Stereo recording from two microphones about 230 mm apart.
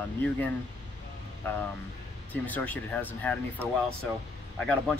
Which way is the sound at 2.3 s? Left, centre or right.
Centre.